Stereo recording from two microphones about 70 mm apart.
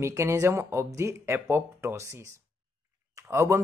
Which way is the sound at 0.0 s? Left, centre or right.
Right.